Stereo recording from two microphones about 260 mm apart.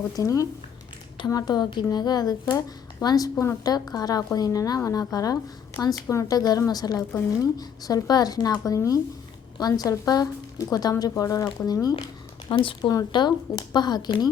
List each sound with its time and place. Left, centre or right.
0.2 s speech: centre